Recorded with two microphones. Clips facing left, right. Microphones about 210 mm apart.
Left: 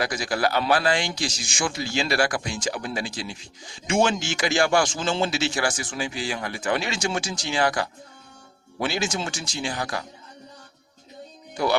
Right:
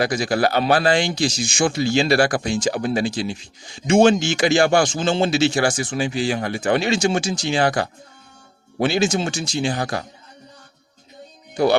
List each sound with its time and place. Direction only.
0.0 s speech: 25° right (ahead or behind)
11.5 s speech: 25° right (ahead or behind)